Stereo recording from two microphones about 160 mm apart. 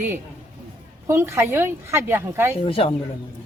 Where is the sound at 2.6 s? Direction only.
35° left (ahead or behind).